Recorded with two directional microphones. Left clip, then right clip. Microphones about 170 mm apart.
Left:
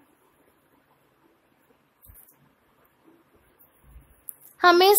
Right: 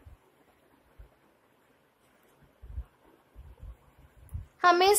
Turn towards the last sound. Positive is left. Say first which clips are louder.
# left 5 dB
turn(degrees=35)  # may be behind; listen again after turning